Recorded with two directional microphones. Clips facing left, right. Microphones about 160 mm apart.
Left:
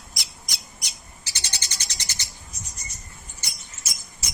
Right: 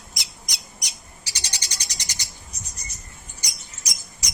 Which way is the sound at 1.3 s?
15° right (ahead or behind).